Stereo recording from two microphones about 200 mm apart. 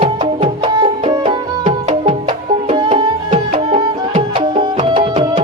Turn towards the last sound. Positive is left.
turn(degrees=-25)  # may be behind; listen again after turning